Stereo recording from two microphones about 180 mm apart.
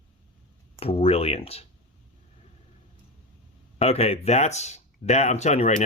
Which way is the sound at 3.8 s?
35° left (ahead or behind).